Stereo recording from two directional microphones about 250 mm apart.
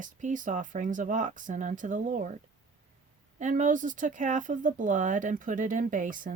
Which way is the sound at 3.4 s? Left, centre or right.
Right.